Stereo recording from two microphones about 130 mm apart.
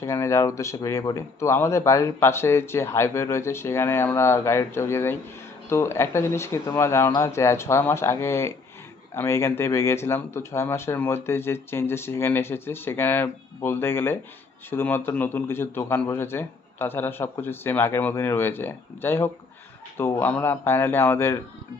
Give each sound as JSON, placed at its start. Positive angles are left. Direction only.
{"t": 0.0, "sound": "a man's voice", "side_deg": 25}